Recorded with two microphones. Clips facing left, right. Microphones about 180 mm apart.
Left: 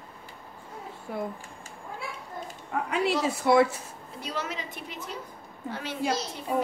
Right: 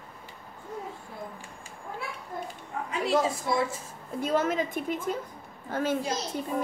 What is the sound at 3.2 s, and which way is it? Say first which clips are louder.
Speech: left 6 dB; 70° left (ahead or behind).